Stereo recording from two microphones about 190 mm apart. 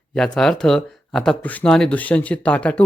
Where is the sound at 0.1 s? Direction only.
Centre (ahead or behind).